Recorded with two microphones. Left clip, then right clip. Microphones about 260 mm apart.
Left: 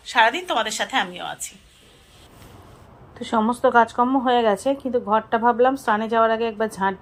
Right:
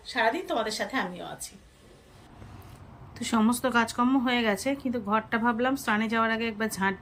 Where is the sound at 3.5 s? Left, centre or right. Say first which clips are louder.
Left 9 dB; right.